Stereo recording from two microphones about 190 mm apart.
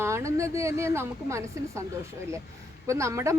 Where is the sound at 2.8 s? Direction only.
15° right (ahead or behind).